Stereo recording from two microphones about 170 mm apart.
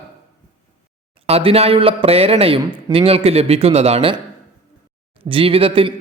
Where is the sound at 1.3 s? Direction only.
35° right (ahead or behind).